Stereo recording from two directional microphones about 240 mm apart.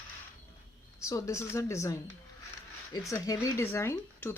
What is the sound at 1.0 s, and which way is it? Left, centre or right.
Speech, centre.